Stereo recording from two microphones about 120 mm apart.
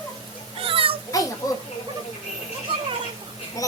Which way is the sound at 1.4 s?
30° left (ahead or behind).